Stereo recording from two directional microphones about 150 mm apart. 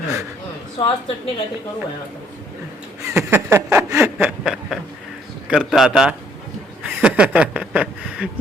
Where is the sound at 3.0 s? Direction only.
20° right (ahead or behind); by 4.8 s centre (ahead or behind).